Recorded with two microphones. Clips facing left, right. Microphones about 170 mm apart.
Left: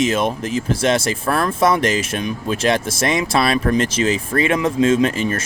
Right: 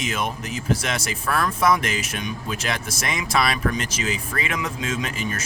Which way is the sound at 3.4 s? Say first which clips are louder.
Left 7 dB; 50° left (ahead or behind).